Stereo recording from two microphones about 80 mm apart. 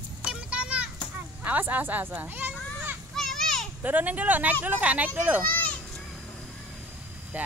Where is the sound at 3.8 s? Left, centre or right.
Right.